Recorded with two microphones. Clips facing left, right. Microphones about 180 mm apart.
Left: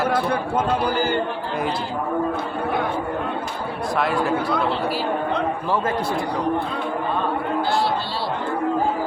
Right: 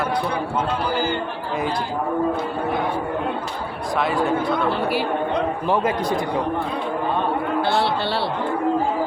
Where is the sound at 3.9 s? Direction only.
Centre (ahead or behind).